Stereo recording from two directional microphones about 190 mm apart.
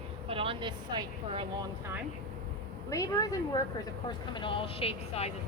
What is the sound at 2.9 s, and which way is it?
Speech, 20° left (ahead or behind).